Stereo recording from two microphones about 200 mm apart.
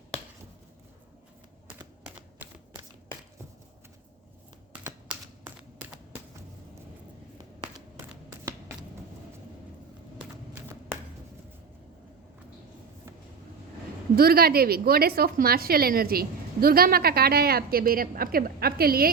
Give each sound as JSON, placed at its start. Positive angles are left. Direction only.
{"t": 4.9, "sound": "computer keyboard", "side_deg": -5}
{"t": 7.6, "sound": "a sound", "side_deg": -10}
{"t": 14.2, "sound": "a woman's voice", "side_deg": -50}